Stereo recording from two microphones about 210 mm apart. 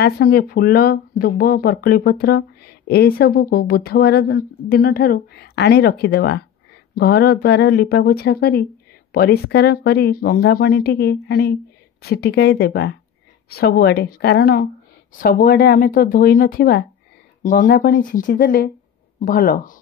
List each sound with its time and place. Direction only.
0.0 s speech: 45° left (ahead or behind)